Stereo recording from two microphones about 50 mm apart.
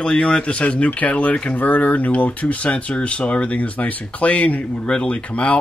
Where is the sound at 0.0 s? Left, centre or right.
Centre.